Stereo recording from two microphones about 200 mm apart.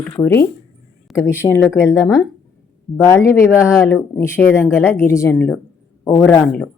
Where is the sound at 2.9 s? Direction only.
15° left (ahead or behind).